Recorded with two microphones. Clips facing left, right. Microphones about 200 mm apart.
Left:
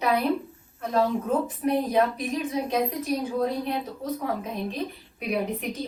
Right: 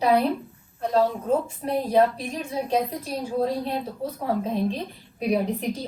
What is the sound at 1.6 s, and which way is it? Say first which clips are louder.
A woman's voice: right 2 dB; 30° right (ahead or behind).